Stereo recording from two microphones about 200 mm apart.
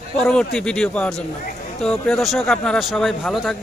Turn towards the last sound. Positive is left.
turn(degrees=0)  # may be behind; listen again after turning